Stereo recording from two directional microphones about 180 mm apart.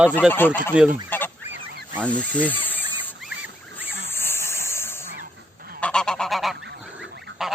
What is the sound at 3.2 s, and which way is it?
Rodents, 5° right (ahead or behind).